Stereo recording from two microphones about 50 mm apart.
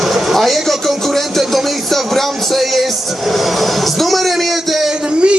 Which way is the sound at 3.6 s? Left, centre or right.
Centre.